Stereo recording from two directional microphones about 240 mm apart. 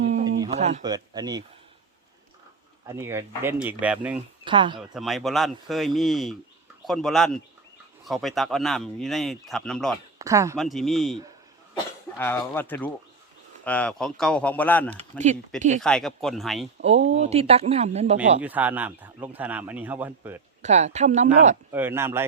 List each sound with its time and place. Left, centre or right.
0.4 s a sound: right
0.8 s speech: centre
2.8 s speech: centre
4.4 s speech: centre
4.9 s speech: centre
10.2 s speech: centre
10.6 s speech: centre
15.2 s speech: right
15.8 s speech: centre
17.1 s speech: right
18.4 s speech: centre
20.6 s speech: right
21.7 s speech: centre